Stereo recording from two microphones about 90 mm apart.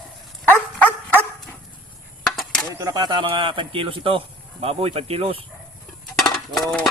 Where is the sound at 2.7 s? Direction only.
40° right (ahead or behind); by 4.2 s 75° right (ahead or behind).